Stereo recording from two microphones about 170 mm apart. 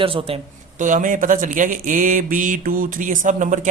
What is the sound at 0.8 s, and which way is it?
Speech, 50° right (ahead or behind).